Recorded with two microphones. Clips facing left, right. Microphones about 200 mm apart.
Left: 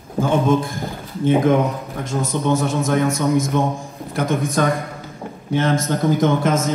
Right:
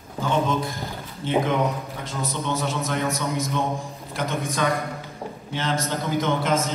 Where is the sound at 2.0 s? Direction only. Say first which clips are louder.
Left 9 dB; 45° left (ahead or behind).